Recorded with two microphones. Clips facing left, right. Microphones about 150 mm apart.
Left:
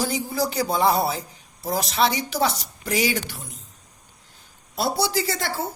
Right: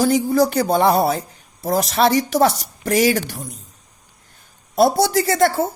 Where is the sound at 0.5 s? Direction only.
65° right (ahead or behind); by 3.5 s 45° right (ahead or behind).